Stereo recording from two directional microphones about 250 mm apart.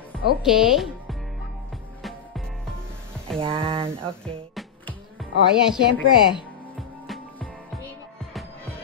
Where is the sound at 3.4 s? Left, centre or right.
Right.